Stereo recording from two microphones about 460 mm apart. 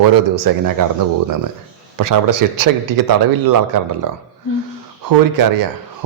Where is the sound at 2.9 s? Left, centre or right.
Right.